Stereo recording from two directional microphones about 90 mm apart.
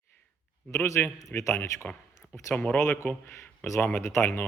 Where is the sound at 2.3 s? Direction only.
30° left (ahead or behind).